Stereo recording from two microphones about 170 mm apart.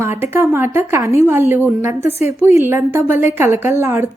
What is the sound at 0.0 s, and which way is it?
A woman's voice, 15° right (ahead or behind).